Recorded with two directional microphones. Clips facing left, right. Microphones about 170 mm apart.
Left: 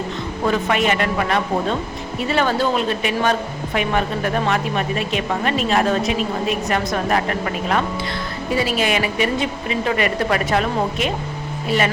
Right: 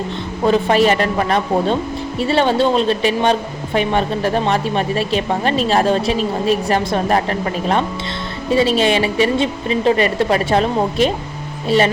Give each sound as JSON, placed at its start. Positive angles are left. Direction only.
{"t": 0.4, "sound": "a woman's voice", "side_deg": -30}